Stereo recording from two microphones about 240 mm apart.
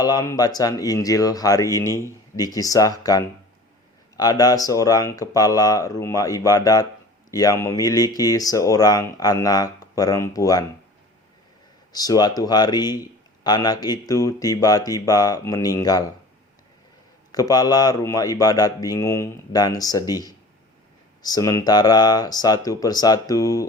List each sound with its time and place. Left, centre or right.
0.0 s a man's voice: centre
11.9 s a man's voice: centre
17.3 s a man's voice: centre